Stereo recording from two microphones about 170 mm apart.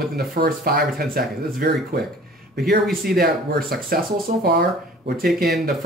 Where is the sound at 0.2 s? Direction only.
60° right (ahead or behind).